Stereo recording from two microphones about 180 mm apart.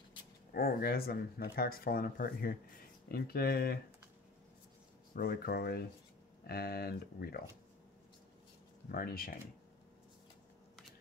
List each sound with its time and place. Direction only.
0.5 s speech: 55° left (ahead or behind)
5.1 s speech: 55° left (ahead or behind)
8.8 s speech: 55° left (ahead or behind)